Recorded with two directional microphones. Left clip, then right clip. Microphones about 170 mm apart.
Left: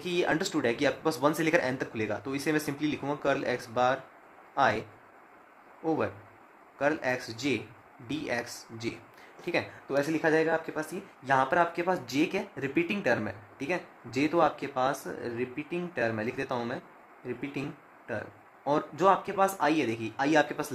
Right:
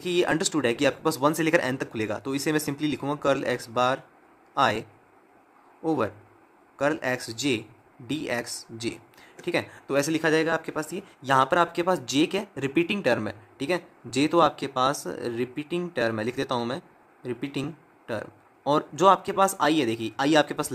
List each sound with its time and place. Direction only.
0.0 s speech: 25° right (ahead or behind)